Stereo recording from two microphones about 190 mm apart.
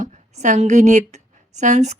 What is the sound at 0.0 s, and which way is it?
A woman's voice, 40° right (ahead or behind).